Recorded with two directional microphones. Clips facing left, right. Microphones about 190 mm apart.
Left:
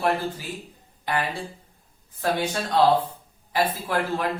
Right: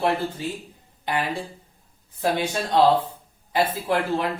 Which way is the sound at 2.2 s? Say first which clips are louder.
Right 1 dB; 20° right (ahead or behind).